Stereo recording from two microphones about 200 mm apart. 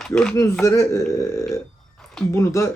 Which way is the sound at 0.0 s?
5° left (ahead or behind).